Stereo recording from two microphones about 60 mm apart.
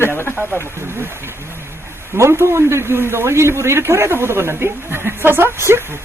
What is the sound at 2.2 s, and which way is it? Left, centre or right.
A man's voice, right.